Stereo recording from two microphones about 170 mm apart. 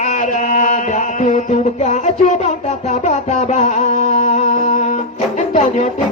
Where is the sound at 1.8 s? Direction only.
40° left (ahead or behind).